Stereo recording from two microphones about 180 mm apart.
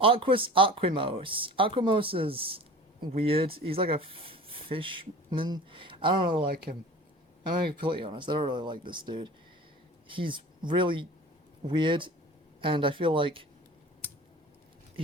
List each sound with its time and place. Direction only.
0.0 s speech: 30° right (ahead or behind)
6.4 s speech: 60° right (ahead or behind)
7.7 s speech: 30° right (ahead or behind)